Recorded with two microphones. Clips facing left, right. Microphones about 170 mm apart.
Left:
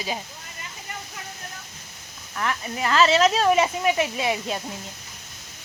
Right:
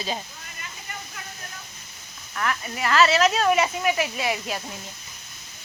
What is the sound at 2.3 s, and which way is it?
Speech, centre (ahead or behind).